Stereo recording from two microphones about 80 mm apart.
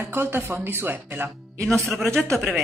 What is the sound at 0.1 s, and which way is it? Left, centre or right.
Speech, right.